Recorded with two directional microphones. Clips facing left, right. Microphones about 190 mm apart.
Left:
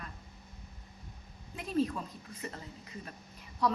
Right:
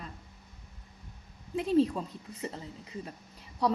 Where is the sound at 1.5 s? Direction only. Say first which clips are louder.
Right 6 dB; 30° right (ahead or behind).